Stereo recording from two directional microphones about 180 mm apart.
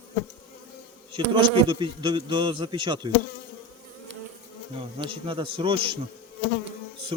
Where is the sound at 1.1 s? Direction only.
30° right (ahead or behind).